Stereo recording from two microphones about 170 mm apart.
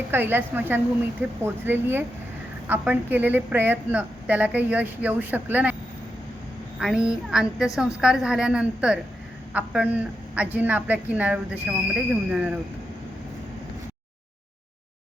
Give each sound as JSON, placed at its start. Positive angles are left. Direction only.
{"t": 0.1, "sound": "a woman's voice", "side_deg": -10}
{"t": 6.7, "sound": "child singing", "side_deg": -5}
{"t": 9.5, "sound": "a woman's voice", "side_deg": -10}